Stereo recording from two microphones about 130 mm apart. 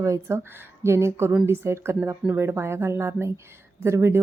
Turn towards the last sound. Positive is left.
turn(degrees=-20)  # may be behind; listen again after turning